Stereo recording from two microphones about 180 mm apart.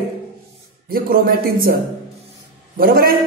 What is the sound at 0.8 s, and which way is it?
Speech, 55° right (ahead or behind).